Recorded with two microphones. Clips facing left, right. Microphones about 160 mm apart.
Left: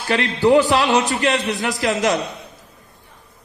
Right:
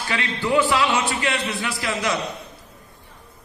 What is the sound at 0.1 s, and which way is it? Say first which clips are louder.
A man's voice: left 8 dB; 40° left (ahead or behind).